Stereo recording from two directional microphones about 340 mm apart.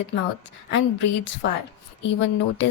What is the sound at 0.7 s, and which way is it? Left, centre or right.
A woman's voice, left.